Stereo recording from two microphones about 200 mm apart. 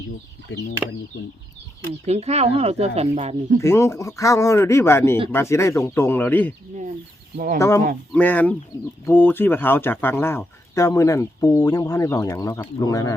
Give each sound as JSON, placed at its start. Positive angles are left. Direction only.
{"t": 0.8, "sound": "speech", "side_deg": -5}
{"t": 2.0, "sound": "speech", "side_deg": -30}
{"t": 3.6, "sound": "speech", "side_deg": 15}
{"t": 7.3, "sound": "speech", "side_deg": -45}
{"t": 8.1, "sound": "speech", "side_deg": 10}